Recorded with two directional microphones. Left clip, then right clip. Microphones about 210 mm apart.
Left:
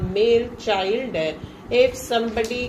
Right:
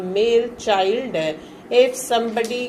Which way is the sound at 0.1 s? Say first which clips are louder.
Right 1 dB; 20° right (ahead or behind).